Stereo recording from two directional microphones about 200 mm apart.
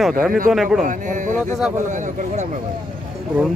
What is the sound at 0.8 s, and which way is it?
Speech, 40° right (ahead or behind).